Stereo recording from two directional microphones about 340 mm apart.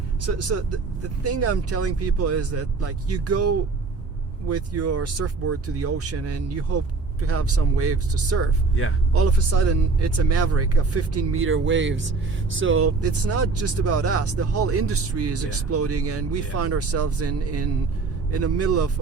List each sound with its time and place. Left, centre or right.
1.2 s speech: right